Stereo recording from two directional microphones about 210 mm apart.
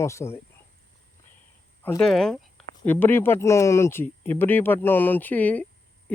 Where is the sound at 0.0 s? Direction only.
15° left (ahead or behind).